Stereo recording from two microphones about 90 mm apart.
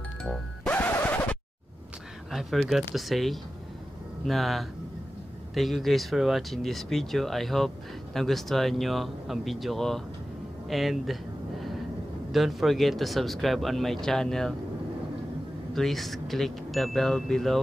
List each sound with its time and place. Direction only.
0.7 s scratch: 20° left (ahead or behind)
2.3 s speech: centre (ahead or behind)
12.3 s speech: centre (ahead or behind)
15.7 s speech: centre (ahead or behind)